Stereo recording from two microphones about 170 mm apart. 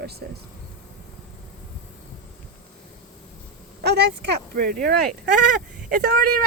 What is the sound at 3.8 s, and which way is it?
Speech, 80° right.